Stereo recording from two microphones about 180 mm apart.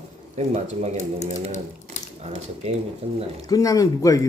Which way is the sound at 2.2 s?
35° right (ahead or behind).